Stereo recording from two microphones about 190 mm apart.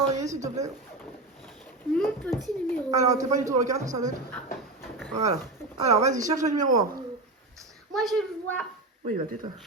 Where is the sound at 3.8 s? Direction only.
40° right (ahead or behind).